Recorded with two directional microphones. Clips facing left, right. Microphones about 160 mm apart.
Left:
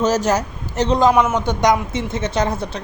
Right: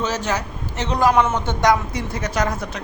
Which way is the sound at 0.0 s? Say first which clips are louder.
Left 6 dB; 40° left (ahead or behind).